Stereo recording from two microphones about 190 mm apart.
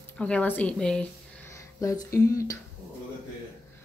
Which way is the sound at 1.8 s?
15° left (ahead or behind).